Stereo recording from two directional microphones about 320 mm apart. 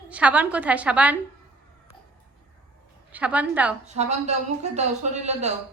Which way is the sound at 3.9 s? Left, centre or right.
Right.